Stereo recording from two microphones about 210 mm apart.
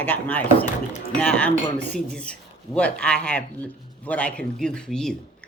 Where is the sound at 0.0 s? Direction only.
10° left (ahead or behind).